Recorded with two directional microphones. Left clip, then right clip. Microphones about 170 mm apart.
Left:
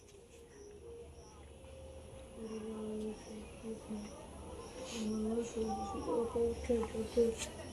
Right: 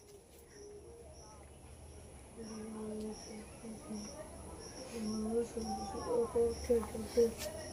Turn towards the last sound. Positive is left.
turn(degrees=-25)  # may be behind; listen again after turning